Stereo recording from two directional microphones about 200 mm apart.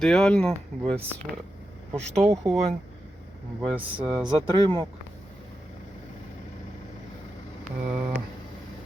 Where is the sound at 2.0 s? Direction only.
35° right (ahead or behind).